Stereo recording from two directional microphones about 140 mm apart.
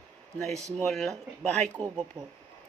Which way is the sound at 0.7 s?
5° left (ahead or behind).